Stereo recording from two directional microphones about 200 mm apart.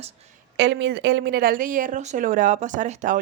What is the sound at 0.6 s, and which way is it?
Speech, 60° right (ahead or behind).